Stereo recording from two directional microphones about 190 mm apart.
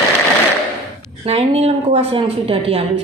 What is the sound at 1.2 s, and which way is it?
Speech, 35° right (ahead or behind).